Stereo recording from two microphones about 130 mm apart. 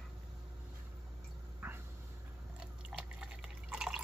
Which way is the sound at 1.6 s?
15° right (ahead or behind).